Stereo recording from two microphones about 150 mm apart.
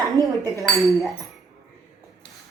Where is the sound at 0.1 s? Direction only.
25° right (ahead or behind).